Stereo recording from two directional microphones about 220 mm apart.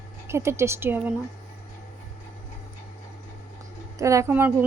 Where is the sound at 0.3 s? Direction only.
10° right (ahead or behind).